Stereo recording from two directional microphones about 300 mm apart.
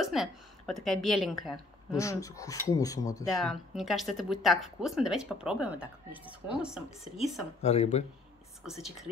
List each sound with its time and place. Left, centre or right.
0.0 s a woman's voice: centre
1.9 s speech: centre
3.3 s speech: centre
7.6 s speech: left
8.6 s speech: centre